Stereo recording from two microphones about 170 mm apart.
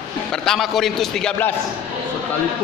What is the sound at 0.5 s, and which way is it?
A man's voice, centre (ahead or behind).